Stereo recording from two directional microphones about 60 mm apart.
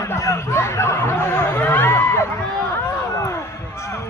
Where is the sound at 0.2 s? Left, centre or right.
Left.